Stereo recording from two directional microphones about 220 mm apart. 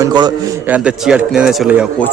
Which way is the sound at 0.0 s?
20° right (ahead or behind).